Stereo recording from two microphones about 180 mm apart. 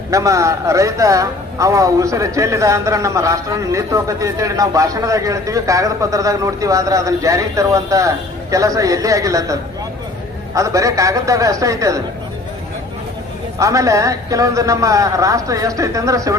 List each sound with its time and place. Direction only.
0.1 s speech: 15° right (ahead or behind)
13.6 s speech: 15° right (ahead or behind)